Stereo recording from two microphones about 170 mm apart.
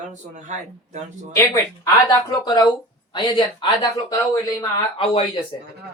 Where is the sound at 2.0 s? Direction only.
25° left (ahead or behind).